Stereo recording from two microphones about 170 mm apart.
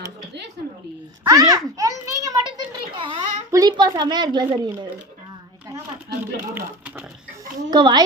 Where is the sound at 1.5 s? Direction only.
20° right (ahead or behind).